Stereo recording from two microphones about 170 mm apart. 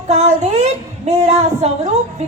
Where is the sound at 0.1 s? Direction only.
40° right (ahead or behind).